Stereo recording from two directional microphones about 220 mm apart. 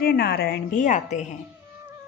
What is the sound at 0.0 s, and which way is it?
A woman's voice, 45° left (ahead or behind).